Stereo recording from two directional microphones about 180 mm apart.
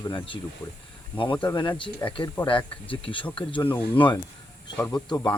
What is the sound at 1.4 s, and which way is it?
A man's voice, 25° left (ahead or behind).